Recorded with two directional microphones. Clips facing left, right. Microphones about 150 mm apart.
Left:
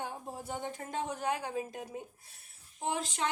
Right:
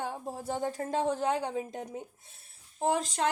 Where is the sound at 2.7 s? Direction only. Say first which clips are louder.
Right 6 dB; 40° right (ahead or behind).